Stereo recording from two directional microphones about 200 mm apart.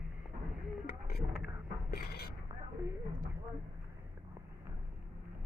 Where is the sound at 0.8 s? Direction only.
50° left (ahead or behind).